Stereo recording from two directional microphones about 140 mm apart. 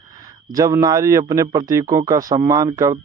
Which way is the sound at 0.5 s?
20° right (ahead or behind).